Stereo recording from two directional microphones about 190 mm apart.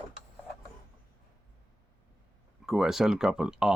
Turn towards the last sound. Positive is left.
turn(degrees=-5)  # may be behind; listen again after turning